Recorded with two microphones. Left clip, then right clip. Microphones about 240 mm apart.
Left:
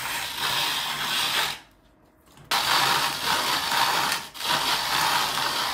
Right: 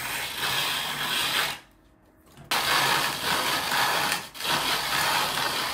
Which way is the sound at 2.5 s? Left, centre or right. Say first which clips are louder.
Left 1 dB; centre.